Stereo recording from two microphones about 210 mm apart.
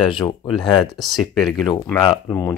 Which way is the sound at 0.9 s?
Centre (ahead or behind).